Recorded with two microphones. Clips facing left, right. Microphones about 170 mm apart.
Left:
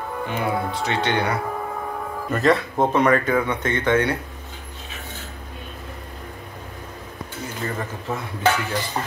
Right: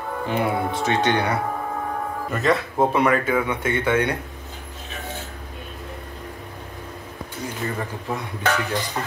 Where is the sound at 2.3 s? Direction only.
Centre (ahead or behind).